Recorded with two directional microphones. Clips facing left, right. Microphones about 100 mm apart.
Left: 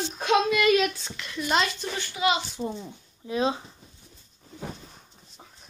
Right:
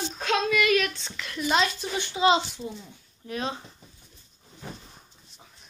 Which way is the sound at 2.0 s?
25° right (ahead or behind).